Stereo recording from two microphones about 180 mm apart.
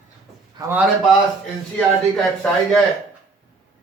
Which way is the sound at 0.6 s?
25° right (ahead or behind).